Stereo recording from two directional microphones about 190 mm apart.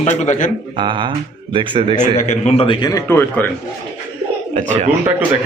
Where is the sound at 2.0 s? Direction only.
40° left (ahead or behind); by 3.4 s 10° left (ahead or behind).